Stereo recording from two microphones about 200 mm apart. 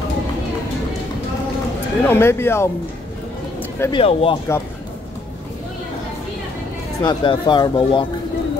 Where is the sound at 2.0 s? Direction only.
10° left (ahead or behind).